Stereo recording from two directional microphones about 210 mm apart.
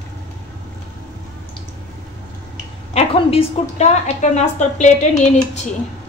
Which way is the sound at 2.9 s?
30° left (ahead or behind).